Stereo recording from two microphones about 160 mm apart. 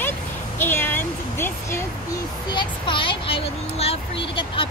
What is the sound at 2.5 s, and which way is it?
Speech, 30° left (ahead or behind).